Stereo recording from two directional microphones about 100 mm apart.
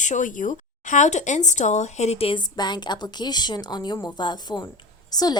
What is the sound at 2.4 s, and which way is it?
A woman's voice, 45° left (ahead or behind).